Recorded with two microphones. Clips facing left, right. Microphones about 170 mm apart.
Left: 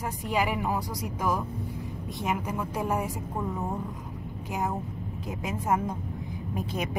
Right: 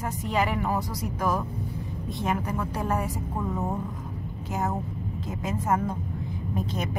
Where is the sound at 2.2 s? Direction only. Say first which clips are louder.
Right 2 dB; 10° left (ahead or behind).